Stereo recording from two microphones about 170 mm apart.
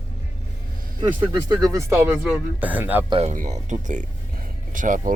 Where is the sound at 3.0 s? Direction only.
35° right (ahead or behind).